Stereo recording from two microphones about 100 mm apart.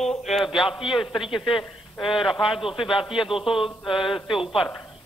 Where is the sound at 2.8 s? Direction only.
60° left (ahead or behind).